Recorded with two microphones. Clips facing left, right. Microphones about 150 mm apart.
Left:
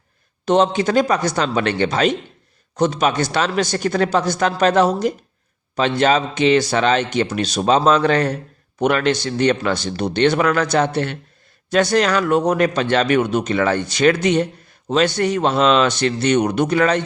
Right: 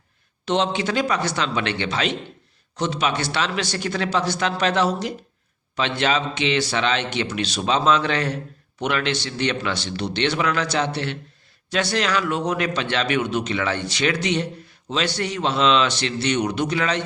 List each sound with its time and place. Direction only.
0.4 s speech: 45° left (ahead or behind)